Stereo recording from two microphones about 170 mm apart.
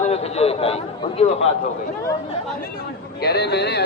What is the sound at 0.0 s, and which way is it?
A man's voice, 40° left (ahead or behind).